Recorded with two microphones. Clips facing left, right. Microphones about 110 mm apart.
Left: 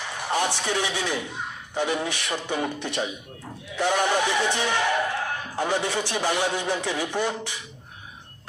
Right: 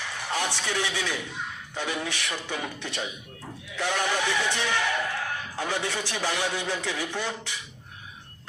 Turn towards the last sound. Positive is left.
turn(degrees=15)  # may be behind; listen again after turning